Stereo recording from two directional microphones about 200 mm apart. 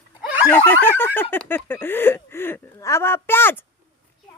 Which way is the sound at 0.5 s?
10° left (ahead or behind).